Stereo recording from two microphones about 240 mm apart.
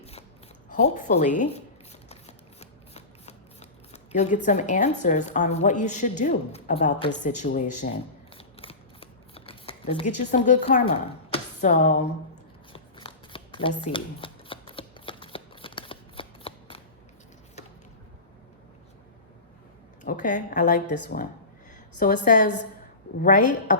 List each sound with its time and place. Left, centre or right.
0.0 s shuffling cards: left
4.4 s a woman's voice: left
8.4 s scissors: left
10.3 s speech: left
12.7 s shuffling cards: left
20.1 s a woman's voice: left
21.9 s a woman's voice: left